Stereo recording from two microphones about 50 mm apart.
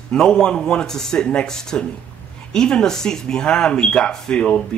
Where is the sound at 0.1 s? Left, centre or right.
Centre.